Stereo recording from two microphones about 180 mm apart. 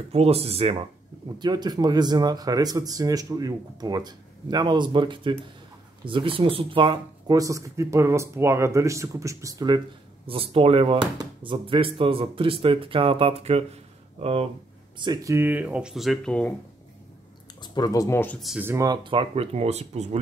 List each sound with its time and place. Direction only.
0.1 s speech: 35° right (ahead or behind)
10.2 s speech: 30° right (ahead or behind)
15.0 s speech: 20° right (ahead or behind); by 16.5 s 5° left (ahead or behind)
17.6 s speech: 20° left (ahead or behind)
18.5 s speech: 10° right (ahead or behind); by 20.2 s 40° right (ahead or behind)